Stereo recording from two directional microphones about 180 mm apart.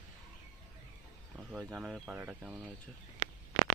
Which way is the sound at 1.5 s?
5° right (ahead or behind).